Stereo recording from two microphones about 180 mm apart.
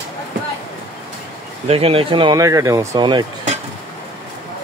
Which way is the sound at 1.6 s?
35° right (ahead or behind).